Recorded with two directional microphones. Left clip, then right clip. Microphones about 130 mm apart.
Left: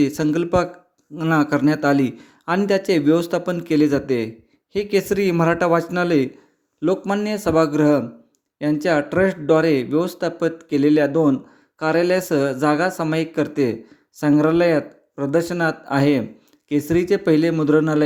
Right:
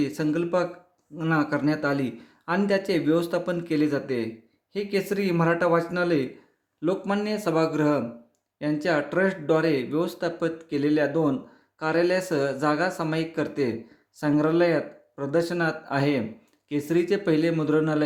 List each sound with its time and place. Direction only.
0.0 s speech: 65° left (ahead or behind)